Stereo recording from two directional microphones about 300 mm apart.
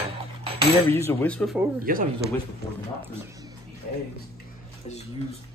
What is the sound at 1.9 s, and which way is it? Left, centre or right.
Speech, right.